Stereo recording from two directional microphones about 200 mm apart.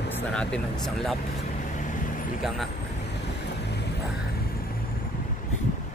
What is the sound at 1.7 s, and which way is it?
Vehicle, 40° left (ahead or behind).